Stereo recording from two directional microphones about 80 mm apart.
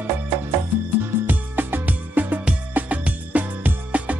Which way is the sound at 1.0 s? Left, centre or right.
Right.